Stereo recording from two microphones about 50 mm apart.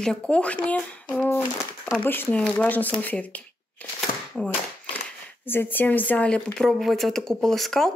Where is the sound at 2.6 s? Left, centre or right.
Left.